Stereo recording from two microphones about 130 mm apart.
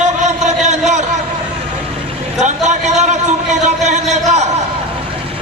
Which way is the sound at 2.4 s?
65° right (ahead or behind).